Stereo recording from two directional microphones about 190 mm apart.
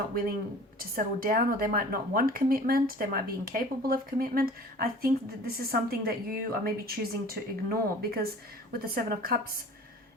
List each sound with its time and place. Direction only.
0.8 s a woman's voice: 50° right (ahead or behind)